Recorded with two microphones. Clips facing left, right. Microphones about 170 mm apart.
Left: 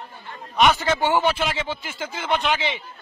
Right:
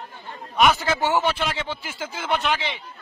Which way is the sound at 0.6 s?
5° right (ahead or behind).